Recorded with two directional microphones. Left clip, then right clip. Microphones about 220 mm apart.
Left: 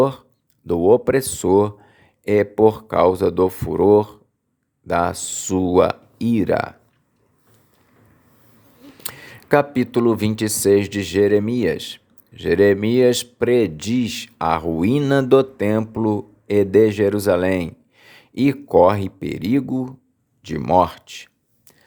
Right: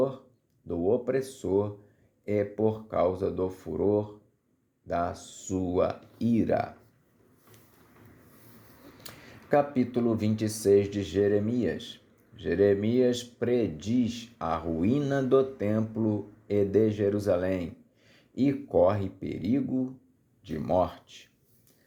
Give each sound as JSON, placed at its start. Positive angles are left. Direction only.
{"t": 0.7, "sound": "speech", "side_deg": 40}
{"t": 9.0, "sound": "speech", "side_deg": 35}